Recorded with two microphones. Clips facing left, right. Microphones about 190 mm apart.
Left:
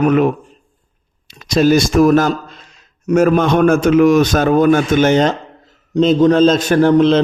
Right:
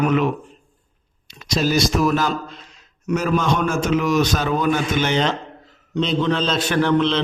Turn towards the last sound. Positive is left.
turn(degrees=45)  # may be behind; listen again after turning